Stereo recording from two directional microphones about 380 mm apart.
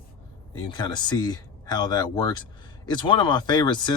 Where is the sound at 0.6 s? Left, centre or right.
Centre.